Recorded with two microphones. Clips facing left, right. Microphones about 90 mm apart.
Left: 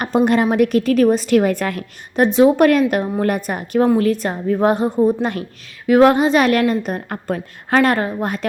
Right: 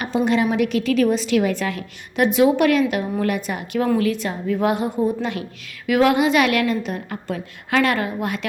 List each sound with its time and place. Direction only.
0.0 s a woman's voice: 50° left (ahead or behind)